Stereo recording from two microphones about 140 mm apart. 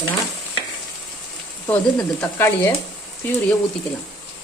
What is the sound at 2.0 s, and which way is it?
Speech, 10° left (ahead or behind).